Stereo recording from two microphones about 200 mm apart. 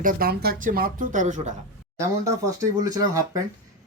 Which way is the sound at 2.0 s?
15° right (ahead or behind).